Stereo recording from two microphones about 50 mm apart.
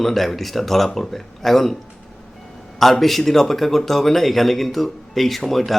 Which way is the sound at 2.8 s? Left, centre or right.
Centre.